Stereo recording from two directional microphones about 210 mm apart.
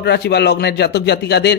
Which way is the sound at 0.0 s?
50° left (ahead or behind).